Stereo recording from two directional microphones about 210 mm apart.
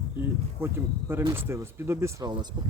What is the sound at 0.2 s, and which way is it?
Speech, 10° right (ahead or behind).